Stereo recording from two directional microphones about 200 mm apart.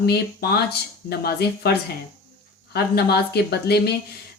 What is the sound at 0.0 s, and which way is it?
Speech, 50° left (ahead or behind).